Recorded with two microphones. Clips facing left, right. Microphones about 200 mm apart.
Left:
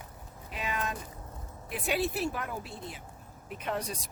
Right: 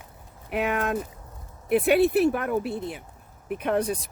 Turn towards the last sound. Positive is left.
turn(degrees=-55)  # may be behind; listen again after turning